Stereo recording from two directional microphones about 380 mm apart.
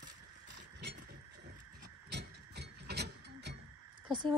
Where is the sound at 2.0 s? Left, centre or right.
Right.